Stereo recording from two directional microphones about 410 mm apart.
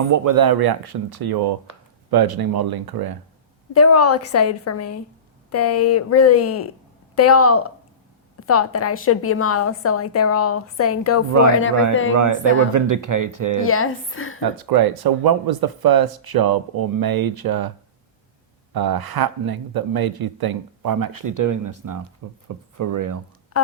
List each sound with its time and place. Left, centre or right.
0.1 s speech: right
3.7 s a woman's voice: left
12.1 s speech: right
13.7 s a woman's voice: left
14.5 s speech: right
18.7 s speech: right